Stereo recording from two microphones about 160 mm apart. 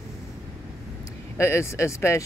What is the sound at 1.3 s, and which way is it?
Speech, 15° left (ahead or behind).